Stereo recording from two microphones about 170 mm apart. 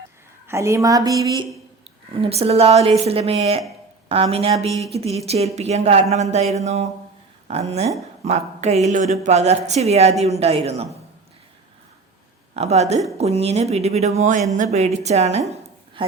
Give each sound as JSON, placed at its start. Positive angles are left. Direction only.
{"t": 0.4, "sound": "a woman's voice", "side_deg": -15}
{"t": 2.1, "sound": "a woman's voice", "side_deg": -35}
{"t": 8.2, "sound": "a woman's voice", "side_deg": -40}
{"t": 12.5, "sound": "a woman's voice", "side_deg": -40}